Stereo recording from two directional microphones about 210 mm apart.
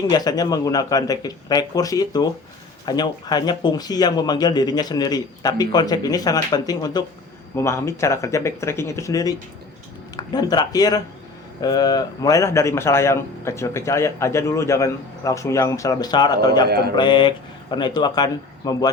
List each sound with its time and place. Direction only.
0.1 s speech: 20° left (ahead or behind)
16.6 s speech: 50° right (ahead or behind)
16.9 s speech: 20° left (ahead or behind)